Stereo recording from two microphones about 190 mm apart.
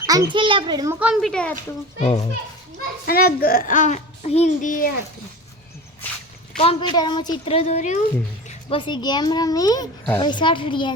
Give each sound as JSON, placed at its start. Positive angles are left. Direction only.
{"t": 0.0, "sound": "a child's voice", "side_deg": -20}
{"t": 0.9, "sound": "a woman's voice", "side_deg": -5}
{"t": 3.1, "sound": "a child's voice", "side_deg": 50}
{"t": 6.6, "sound": "a child's voice", "side_deg": 30}
{"t": 8.4, "sound": "a child's voice", "side_deg": 30}